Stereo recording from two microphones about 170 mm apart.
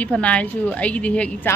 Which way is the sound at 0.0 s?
5° left (ahead or behind).